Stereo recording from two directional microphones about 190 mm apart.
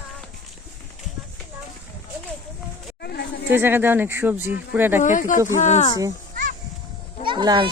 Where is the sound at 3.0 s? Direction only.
60° left (ahead or behind).